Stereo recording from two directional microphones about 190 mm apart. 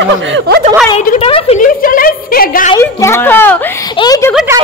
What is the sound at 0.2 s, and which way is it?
Speech, 75° right (ahead or behind).